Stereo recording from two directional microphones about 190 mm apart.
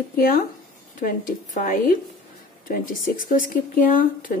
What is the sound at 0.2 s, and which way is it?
Speech, 50° left (ahead or behind).